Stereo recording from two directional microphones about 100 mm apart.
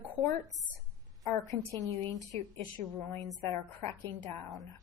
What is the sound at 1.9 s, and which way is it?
Speech, 90° right.